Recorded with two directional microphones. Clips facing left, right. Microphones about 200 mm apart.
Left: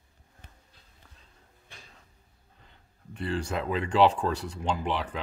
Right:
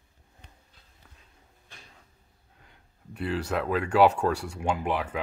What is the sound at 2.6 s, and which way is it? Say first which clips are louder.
Speech: right 1 dB; 5° right (ahead or behind).